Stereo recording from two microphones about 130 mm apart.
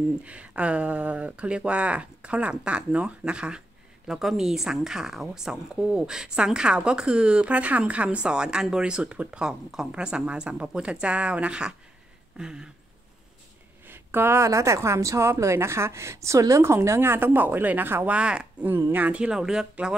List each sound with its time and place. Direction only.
0.2 s a woman's voice: 10° right (ahead or behind)
12.4 s a sound: 5° right (ahead or behind)
13.8 s a woman's voice: 15° right (ahead or behind)